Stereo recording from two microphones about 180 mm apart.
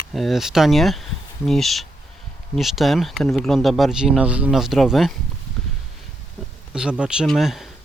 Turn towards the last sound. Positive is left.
turn(degrees=0)  # may be behind; listen again after turning